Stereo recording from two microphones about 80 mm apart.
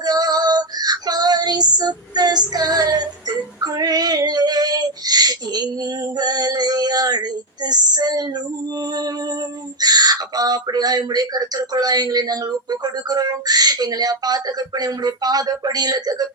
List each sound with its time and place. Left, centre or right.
0.0 s female singing: right
9.8 s speech: right